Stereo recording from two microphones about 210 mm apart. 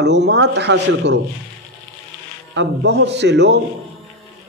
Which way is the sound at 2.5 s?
55° right (ahead or behind).